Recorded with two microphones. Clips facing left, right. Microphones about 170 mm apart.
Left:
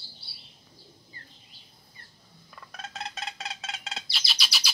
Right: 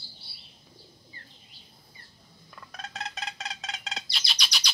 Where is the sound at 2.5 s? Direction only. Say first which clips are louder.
Even; centre (ahead or behind).